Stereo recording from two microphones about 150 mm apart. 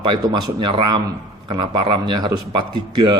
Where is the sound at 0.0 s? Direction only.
30° right (ahead or behind).